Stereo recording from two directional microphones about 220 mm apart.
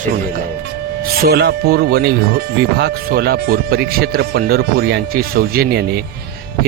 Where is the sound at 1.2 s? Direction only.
45° right (ahead or behind).